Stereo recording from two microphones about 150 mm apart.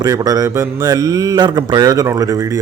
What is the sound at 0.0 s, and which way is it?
A man's voice, 25° right (ahead or behind).